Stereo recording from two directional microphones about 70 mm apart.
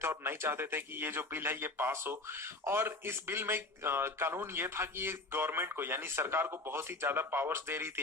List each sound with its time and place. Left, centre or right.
0.0 s a man's voice: right